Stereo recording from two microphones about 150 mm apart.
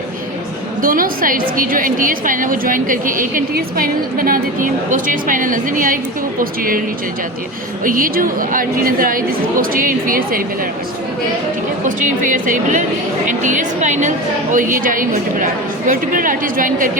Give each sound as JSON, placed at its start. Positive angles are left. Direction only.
{"t": 0.8, "sound": "a woman's voice", "side_deg": -70}
{"t": 7.9, "sound": "a woman's voice", "side_deg": -70}
{"t": 11.9, "sound": "a woman's voice", "side_deg": -60}